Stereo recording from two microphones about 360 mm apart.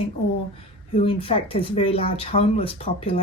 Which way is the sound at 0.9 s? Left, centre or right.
Centre.